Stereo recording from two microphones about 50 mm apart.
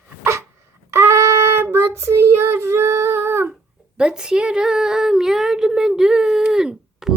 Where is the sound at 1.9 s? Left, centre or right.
Right.